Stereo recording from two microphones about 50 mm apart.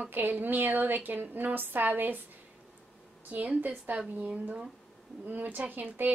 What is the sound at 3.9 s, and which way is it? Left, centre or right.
A woman's voice, right.